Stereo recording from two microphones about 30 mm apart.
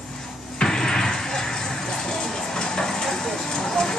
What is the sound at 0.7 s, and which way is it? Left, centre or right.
Music, centre.